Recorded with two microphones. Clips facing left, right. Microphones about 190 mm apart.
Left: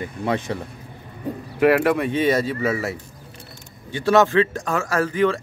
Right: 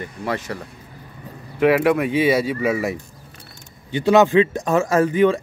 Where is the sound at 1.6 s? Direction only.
Centre (ahead or behind).